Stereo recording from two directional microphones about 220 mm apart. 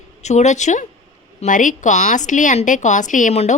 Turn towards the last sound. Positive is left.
turn(degrees=30)  # may be behind; listen again after turning